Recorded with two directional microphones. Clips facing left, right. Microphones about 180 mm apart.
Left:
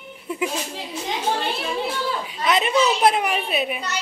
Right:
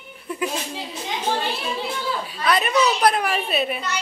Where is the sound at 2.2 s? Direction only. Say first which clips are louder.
Even; 20° left (ahead or behind).